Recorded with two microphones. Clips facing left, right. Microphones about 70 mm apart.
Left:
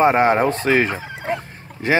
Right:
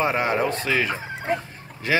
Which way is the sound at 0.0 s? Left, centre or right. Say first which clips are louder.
Left 7 dB; left.